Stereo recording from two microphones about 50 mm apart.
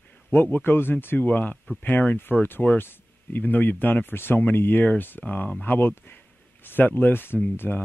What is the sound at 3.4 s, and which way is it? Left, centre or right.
Speech, left.